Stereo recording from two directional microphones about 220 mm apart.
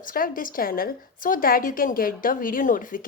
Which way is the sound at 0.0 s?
40° left (ahead or behind).